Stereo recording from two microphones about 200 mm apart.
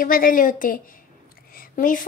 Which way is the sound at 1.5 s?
45° left (ahead or behind).